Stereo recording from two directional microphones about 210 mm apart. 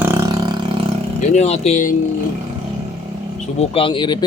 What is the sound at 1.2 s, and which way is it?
Speech, 35° left (ahead or behind).